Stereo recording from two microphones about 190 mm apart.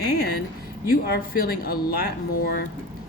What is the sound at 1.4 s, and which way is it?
Speech, 50° left (ahead or behind).